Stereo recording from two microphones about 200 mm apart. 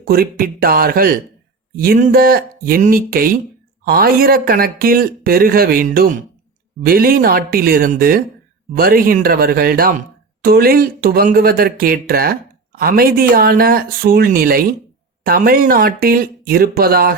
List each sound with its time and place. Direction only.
0.0 s speech: 45° right (ahead or behind)